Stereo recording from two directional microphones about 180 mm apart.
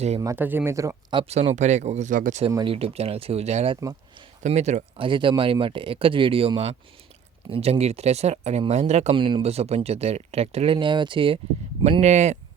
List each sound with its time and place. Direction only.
0.2 s speech: 15° right (ahead or behind)
1.2 s speech: 35° right (ahead or behind)
2.6 s speech: 35° right (ahead or behind)